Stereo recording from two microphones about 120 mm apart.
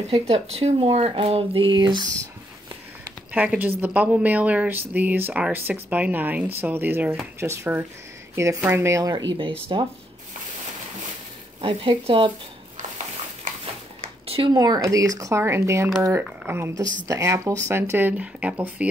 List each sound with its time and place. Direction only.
0.1 s speech: 55° right (ahead or behind); by 2.0 s 40° right (ahead or behind)
3.3 s a woman's voice: 15° right (ahead or behind)
9.1 s speech: 40° right (ahead or behind)
11.6 s speech: 50° right (ahead or behind)
12.7 s a sound: 90° right
14.2 s a sound: 55° right (ahead or behind)
14.5 s speech: 30° right (ahead or behind); by 18.9 s 10° right (ahead or behind)